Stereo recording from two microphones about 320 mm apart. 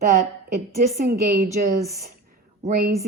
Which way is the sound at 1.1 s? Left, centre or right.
Right.